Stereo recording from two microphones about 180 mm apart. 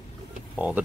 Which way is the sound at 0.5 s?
10° right (ahead or behind).